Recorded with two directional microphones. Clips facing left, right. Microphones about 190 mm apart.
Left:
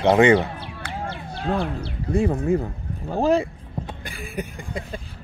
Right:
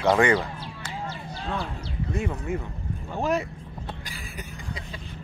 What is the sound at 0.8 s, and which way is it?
Music, 60° left (ahead or behind).